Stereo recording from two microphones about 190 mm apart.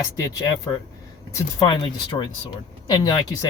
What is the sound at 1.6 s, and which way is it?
Speech, 25° left (ahead or behind).